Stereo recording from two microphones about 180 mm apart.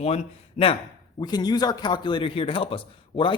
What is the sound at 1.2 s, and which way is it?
Speech, 20° left (ahead or behind).